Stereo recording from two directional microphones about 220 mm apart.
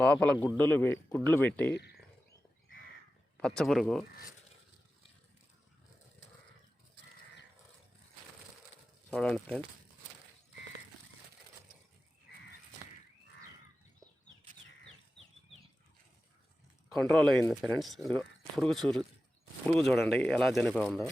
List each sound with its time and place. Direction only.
0.0 s a man's voice: 5° left (ahead or behind)
1.7 s speech: 45° left (ahead or behind)
3.3 s speech: 5° left (ahead or behind)
9.0 s speech: 5° left (ahead or behind)
17.1 s speech: centre (ahead or behind)